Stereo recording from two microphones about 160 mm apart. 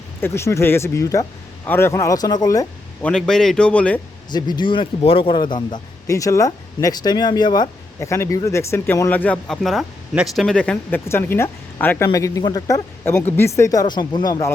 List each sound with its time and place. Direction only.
0.2 s a man's voice: 15° left (ahead or behind)
3.0 s a man's voice: 5° left (ahead or behind)
4.3 s a man's voice: 25° left (ahead or behind)